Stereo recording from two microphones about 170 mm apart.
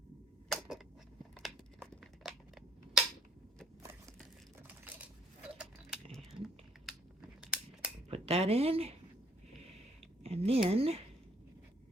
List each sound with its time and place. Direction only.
1.4 s a sound: centre (ahead or behind)
5.5 s a sound: 5° right (ahead or behind)
6.4 s typing: 5° right (ahead or behind)
7.4 s scissors: 5° right (ahead or behind)
8.1 s speech: 35° right (ahead or behind)
10.2 s speech: 35° right (ahead or behind)